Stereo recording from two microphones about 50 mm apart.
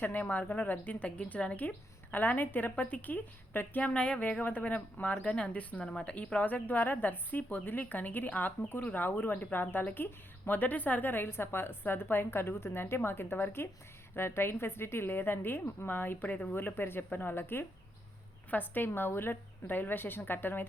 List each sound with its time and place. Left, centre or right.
0.0 s a woman's voice: left
5.8 s speech: centre
6.1 s a woman's voice: left
11.1 s a woman's voice: left